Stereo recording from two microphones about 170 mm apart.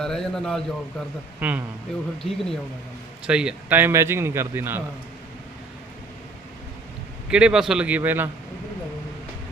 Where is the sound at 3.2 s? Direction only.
5° right (ahead or behind).